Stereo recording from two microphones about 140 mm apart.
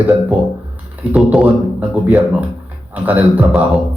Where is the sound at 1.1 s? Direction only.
5° right (ahead or behind).